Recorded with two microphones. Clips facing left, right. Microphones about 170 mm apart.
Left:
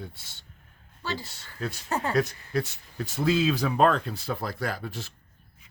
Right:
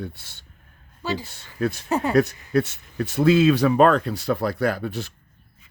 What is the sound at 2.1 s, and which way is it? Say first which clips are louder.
Speech: right 9 dB; 65° right (ahead or behind).